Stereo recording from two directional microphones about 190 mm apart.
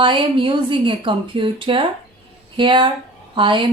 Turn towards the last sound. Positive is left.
turn(degrees=-25)  # may be behind; listen again after turning